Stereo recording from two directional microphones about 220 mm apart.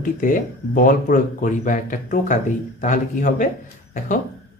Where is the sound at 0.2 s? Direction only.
35° left (ahead or behind).